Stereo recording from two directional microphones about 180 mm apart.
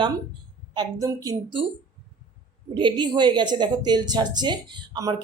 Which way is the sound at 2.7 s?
25° right (ahead or behind).